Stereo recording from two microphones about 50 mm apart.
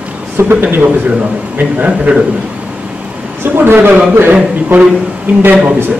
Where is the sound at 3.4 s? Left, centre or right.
Right.